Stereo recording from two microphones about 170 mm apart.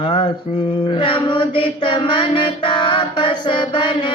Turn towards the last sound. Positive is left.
turn(degrees=30)  # may be behind; listen again after turning